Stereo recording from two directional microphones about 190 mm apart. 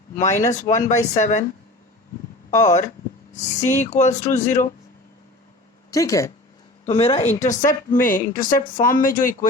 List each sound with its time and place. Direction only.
0.2 s speech: 40° left (ahead or behind)
2.5 s speech: 40° left (ahead or behind)
5.9 s speech: 15° left (ahead or behind)
6.8 s speech: 30° left (ahead or behind); by 9.5 s 45° left (ahead or behind)